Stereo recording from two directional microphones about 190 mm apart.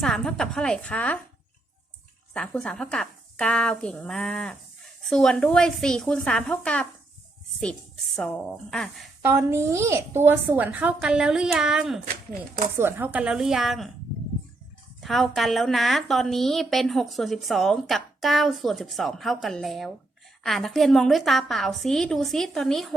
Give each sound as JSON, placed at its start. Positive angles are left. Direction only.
{"t": 0.0, "sound": "a woman's voice", "side_deg": 0}
{"t": 2.3, "sound": "a woman's voice", "side_deg": 5}
{"t": 9.2, "sound": "a woman's voice", "side_deg": -15}
{"t": 15.0, "sound": "a woman's voice", "side_deg": 0}